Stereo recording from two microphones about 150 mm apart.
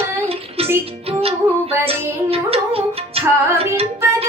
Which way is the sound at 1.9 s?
40° right (ahead or behind).